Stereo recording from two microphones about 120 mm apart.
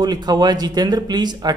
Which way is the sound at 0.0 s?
35° right (ahead or behind).